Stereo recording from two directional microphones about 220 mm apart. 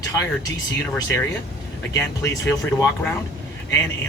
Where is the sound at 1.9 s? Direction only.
15° left (ahead or behind).